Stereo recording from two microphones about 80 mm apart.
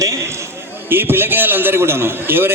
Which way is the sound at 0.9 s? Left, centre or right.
Right.